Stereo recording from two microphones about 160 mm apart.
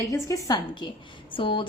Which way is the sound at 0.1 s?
20° left (ahead or behind).